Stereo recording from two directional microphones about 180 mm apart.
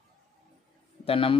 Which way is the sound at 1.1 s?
30° left (ahead or behind).